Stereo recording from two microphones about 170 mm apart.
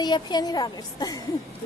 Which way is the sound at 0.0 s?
25° left (ahead or behind).